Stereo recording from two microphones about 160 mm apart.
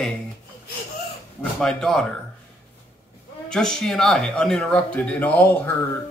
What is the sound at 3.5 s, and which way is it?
Speech, 5° left (ahead or behind).